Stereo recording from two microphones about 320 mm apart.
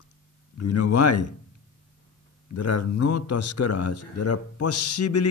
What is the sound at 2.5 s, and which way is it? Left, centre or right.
A man's voice, left.